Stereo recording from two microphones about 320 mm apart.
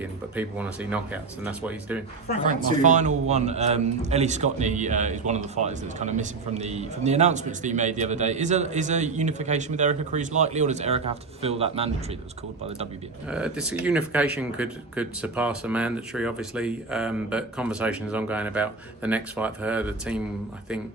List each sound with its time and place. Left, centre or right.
0.0 s speech: centre
2.8 s a man's voice: right
13.3 s speech: centre